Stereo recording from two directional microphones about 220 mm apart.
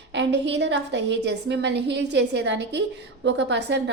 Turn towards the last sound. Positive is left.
turn(degrees=-50)  # may be behind; listen again after turning